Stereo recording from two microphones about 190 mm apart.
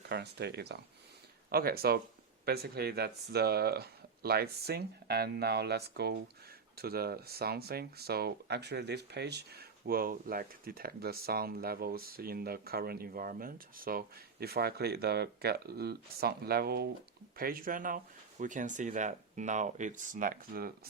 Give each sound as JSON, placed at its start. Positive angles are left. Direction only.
{"t": 0.1, "sound": "speech", "side_deg": -60}